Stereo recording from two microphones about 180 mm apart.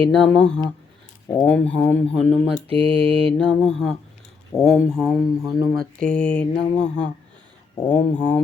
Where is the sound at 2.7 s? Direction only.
30° right (ahead or behind).